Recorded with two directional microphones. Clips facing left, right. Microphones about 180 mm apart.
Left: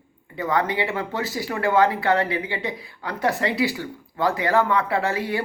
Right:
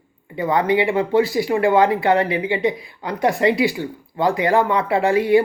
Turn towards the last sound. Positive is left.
turn(degrees=-15)  # may be behind; listen again after turning